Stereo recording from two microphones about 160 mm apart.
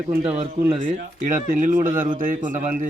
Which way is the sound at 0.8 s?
55° right (ahead or behind).